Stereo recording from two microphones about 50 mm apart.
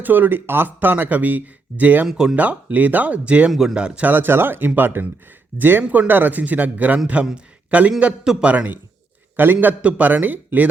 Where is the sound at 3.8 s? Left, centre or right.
Centre.